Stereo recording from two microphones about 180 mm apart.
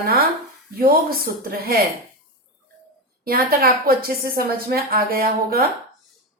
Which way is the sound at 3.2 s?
55° right (ahead or behind).